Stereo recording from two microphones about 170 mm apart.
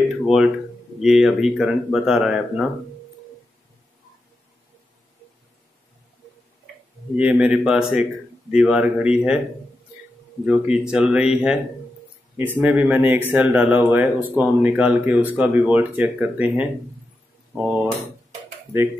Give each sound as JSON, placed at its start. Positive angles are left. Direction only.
{"t": 0.2, "sound": "speech", "side_deg": 0}
{"t": 7.2, "sound": "speech", "side_deg": -10}
{"t": 10.4, "sound": "speech", "side_deg": -5}